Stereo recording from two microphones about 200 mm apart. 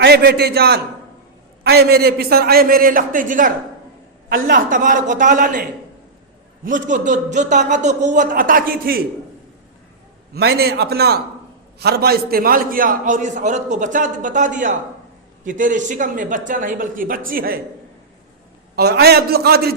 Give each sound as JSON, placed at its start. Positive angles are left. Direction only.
{"t": 0.0, "sound": "a man's voice", "side_deg": -50}
{"t": 6.7, "sound": "a man's voice", "side_deg": -40}
{"t": 10.3, "sound": "a man's voice", "side_deg": -50}
{"t": 18.8, "sound": "a man's voice", "side_deg": -55}